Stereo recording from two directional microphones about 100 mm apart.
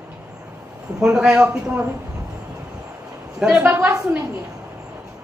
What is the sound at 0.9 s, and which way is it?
Speech, 5° right (ahead or behind).